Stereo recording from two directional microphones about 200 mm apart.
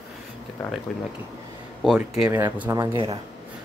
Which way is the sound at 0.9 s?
5° left (ahead or behind).